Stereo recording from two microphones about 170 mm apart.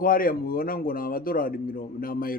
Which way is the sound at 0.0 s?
55° left (ahead or behind).